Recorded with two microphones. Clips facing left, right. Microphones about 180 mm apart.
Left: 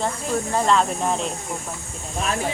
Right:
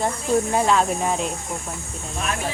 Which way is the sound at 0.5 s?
5° right (ahead or behind).